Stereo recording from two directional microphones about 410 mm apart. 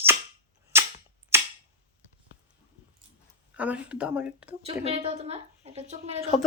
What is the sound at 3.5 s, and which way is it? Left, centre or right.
Speech, centre.